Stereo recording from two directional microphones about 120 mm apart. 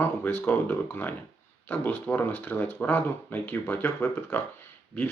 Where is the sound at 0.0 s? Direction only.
15° left (ahead or behind).